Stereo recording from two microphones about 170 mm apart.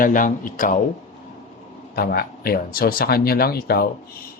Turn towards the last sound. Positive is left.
turn(degrees=65)  # may be behind; listen again after turning